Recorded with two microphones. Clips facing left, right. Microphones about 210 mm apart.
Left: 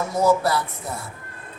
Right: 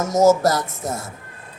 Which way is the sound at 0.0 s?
45° right (ahead or behind).